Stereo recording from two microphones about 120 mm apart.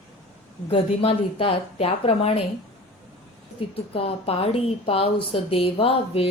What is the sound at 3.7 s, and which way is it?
A woman's voice, 55° left (ahead or behind).